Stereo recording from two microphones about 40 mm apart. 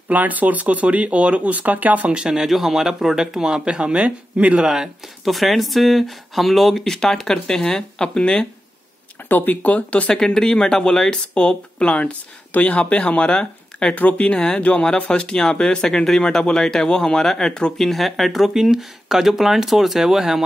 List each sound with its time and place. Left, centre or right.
0.1 s speech: right
2.1 s speech: centre
2.4 s speech: centre
3.6 s speech: right
5.2 s speech: centre; by 8.5 s left
9.3 s speech: left
9.6 s speech: left
10.1 s speech: centre
13.9 s speech: left
15.0 s speech: left
17.7 s speech: centre